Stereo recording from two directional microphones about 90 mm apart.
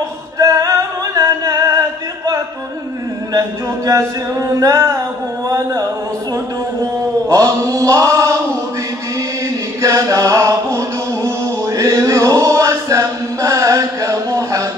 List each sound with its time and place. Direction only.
0.4 s music: 40° right (ahead or behind)
3.3 s a sound: 35° right (ahead or behind)
6.8 s chant: 35° right (ahead or behind)
9.8 s chant: 35° right (ahead or behind)